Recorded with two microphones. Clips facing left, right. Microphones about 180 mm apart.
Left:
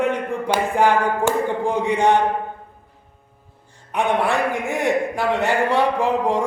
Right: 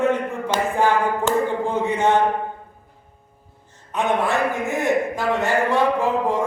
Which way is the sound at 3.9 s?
15° left (ahead or behind).